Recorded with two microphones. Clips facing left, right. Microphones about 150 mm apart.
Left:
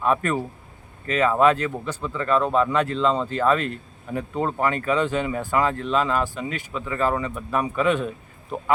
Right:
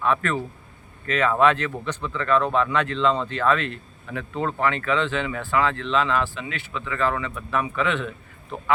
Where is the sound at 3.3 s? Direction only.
40° left (ahead or behind).